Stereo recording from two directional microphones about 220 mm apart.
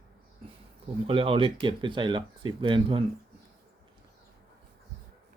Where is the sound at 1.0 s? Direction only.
25° right (ahead or behind).